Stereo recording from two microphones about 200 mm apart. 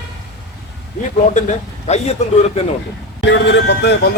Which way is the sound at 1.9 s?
35° left (ahead or behind).